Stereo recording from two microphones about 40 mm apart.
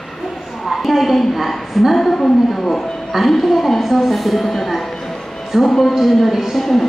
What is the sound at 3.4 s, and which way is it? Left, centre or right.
A woman's voice, centre.